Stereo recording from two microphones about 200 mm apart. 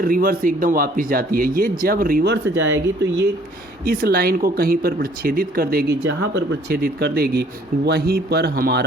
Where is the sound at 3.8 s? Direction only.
50° right (ahead or behind).